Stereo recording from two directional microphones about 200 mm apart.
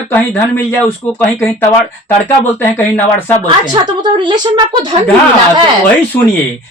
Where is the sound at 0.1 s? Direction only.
10° left (ahead or behind).